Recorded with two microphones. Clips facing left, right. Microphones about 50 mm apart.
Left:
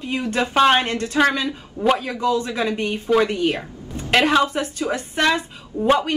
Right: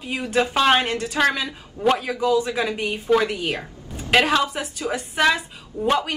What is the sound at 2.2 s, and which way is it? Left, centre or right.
Speech, centre.